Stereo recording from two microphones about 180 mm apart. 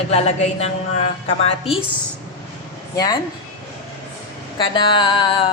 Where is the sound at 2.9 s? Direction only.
20° left (ahead or behind).